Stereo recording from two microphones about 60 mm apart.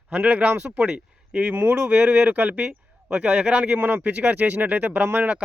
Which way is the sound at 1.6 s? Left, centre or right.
Right.